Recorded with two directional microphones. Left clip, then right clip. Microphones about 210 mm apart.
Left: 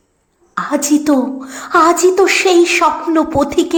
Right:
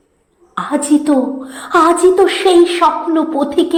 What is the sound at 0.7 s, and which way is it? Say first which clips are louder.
A woman's voice: right 1 dB; 20° left (ahead or behind).